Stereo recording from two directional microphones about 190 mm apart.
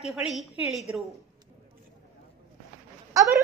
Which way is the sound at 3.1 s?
15° right (ahead or behind).